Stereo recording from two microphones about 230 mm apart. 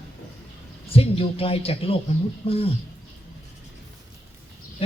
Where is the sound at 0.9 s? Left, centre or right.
Left.